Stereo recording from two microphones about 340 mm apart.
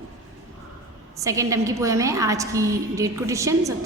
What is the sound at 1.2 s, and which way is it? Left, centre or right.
A woman's voice, centre.